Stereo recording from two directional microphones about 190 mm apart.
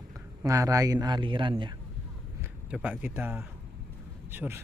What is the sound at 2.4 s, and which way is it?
Speech, 5° right (ahead or behind).